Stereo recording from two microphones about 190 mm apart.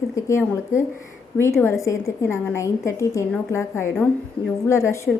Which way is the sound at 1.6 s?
15° left (ahead or behind).